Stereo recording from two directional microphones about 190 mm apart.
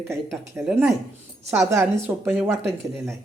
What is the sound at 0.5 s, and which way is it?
Speech, 10° right (ahead or behind).